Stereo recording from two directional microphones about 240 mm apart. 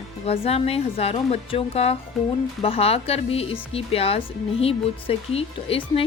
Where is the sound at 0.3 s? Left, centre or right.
Left.